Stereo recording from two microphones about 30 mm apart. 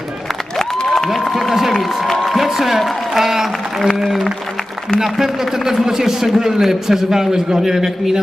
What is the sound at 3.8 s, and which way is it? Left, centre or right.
A man's voice, centre.